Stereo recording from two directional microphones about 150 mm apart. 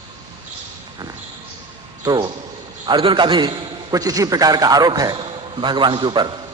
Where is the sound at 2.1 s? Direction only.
30° right (ahead or behind).